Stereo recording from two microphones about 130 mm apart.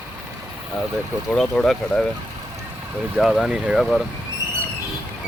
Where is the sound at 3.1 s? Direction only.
Centre (ahead or behind).